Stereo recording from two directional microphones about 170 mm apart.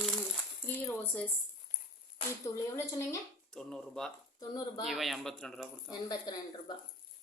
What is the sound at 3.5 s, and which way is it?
A woman's voice, 5° left (ahead or behind).